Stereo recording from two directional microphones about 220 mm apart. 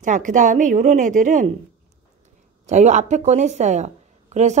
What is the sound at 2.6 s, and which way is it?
Speech, 30° right (ahead or behind).